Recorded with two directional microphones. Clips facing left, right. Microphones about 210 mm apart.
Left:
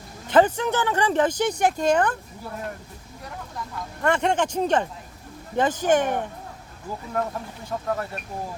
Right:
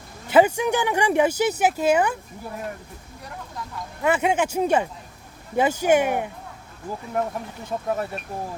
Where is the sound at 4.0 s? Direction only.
5° right (ahead or behind).